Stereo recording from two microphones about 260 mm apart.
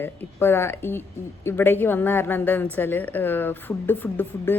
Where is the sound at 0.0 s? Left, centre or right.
Centre.